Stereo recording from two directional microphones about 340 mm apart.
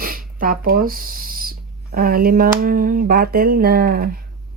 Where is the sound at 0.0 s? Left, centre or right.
Right.